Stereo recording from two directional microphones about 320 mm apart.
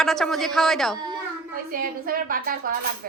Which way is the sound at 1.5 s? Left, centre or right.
Right.